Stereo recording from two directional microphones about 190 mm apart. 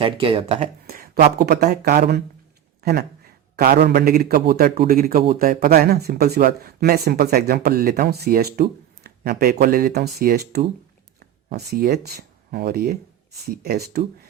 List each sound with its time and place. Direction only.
0.0 s speech: 30° right (ahead or behind)
0.9 s a man's voice: 50° right (ahead or behind)